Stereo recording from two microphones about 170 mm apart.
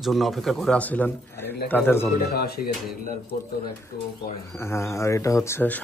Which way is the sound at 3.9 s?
60° left (ahead or behind).